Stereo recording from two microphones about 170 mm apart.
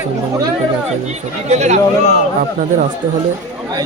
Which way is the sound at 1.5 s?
45° right (ahead or behind).